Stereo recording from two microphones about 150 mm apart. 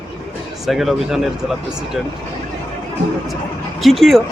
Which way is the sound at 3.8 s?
Centre (ahead or behind).